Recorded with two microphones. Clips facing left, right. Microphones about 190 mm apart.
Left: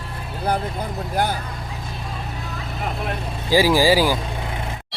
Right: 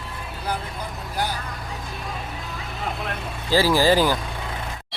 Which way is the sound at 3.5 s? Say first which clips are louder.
Left 2 dB; 15° left (ahead or behind).